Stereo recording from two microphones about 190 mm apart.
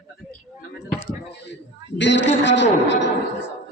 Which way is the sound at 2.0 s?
70° left (ahead or behind).